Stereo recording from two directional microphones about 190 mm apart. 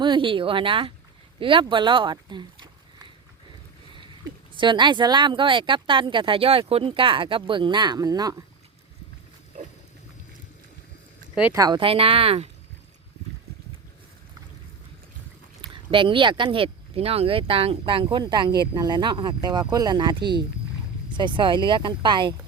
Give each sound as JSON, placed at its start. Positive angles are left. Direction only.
{"t": 0.0, "sound": "speech", "side_deg": -25}
{"t": 4.5, "sound": "speech", "side_deg": -25}
{"t": 11.5, "sound": "speech", "side_deg": -20}
{"t": 15.7, "sound": "speech", "side_deg": -25}